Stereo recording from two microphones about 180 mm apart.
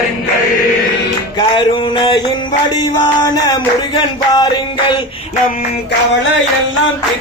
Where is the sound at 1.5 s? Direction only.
25° left (ahead or behind).